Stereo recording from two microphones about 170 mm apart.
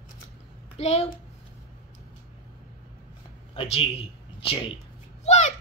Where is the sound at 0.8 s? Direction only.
40° left (ahead or behind).